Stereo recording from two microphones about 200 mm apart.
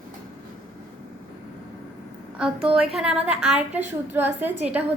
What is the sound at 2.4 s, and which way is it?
A woman's voice, 5° right (ahead or behind).